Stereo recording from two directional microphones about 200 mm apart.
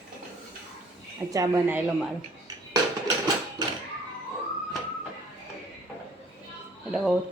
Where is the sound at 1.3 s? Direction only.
15° right (ahead or behind).